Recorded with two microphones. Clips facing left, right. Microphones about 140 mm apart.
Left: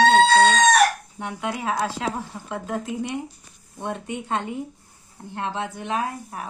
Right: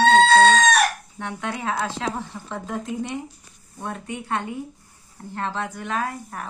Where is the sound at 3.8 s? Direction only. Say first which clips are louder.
Left 2 dB; 20° left (ahead or behind).